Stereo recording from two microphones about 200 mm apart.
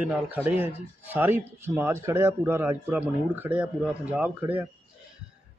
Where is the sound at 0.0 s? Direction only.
10° right (ahead or behind).